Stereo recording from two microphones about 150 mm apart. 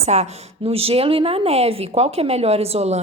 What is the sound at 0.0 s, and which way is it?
A woman's voice, 45° right (ahead or behind).